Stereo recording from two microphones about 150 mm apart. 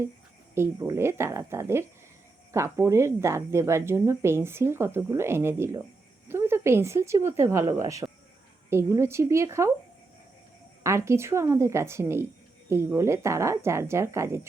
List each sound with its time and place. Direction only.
0.5 s a woman's voice: 20° right (ahead or behind)
10.8 s a woman's voice: 20° right (ahead or behind)